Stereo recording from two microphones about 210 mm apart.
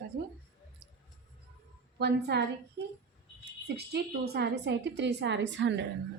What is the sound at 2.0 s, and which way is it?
A woman's voice, 50° right (ahead or behind).